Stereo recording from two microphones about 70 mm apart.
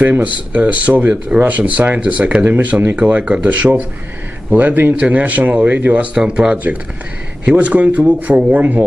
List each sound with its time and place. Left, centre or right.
0.0 s speech: right